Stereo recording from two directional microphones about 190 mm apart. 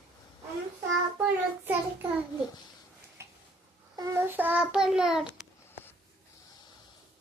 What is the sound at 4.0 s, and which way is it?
Child singing, 15° right (ahead or behind).